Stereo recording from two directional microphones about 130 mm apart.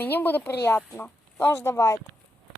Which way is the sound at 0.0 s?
15° left (ahead or behind).